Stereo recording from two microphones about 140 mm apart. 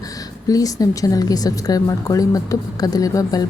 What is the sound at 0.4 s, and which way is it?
A woman's voice, 25° left (ahead or behind).